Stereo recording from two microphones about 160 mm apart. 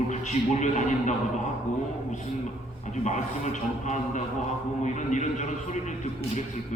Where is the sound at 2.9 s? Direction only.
45° left (ahead or behind).